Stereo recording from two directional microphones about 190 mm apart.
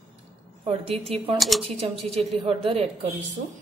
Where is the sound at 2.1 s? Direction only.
30° right (ahead or behind).